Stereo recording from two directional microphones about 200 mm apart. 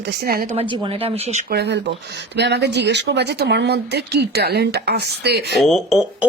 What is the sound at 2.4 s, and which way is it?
Speech, 55° right (ahead or behind).